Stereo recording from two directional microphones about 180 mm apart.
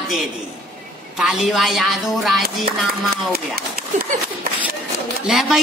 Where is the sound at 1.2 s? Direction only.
5° right (ahead or behind).